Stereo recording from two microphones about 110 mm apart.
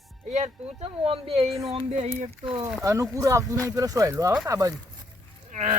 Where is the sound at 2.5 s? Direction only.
45° right (ahead or behind).